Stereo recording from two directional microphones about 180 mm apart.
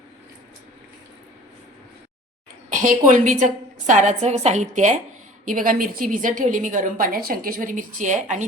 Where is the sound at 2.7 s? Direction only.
50° right (ahead or behind).